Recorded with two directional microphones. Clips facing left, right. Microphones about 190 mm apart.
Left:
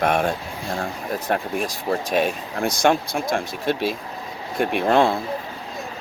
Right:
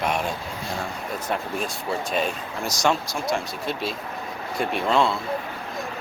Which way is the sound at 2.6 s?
55° left (ahead or behind).